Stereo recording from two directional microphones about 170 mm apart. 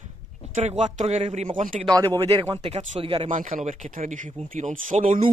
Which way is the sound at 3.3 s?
50° right (ahead or behind).